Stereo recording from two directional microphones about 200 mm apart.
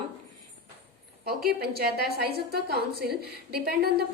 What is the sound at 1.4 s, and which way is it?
A woman's voice, 50° right (ahead or behind).